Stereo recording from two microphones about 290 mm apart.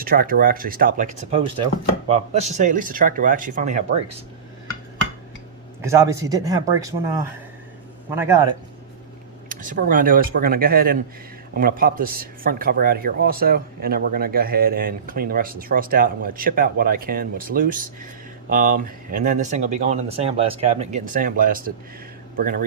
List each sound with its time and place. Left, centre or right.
0.0 s speech: right
5.8 s speech: centre
9.5 s a man's voice: right